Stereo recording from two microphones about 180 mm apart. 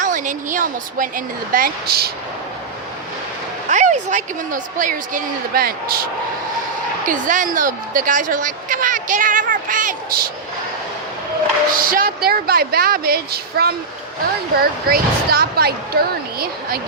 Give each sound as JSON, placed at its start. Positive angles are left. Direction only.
{"t": 0.0, "sound": "a woman's voice", "side_deg": -45}
{"t": 3.7, "sound": "a woman's voice", "side_deg": -40}
{"t": 7.1, "sound": "a woman's voice", "side_deg": -45}
{"t": 11.7, "sound": "speech", "side_deg": -50}